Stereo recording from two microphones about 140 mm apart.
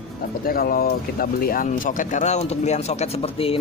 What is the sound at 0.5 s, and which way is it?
Speech, 90° left.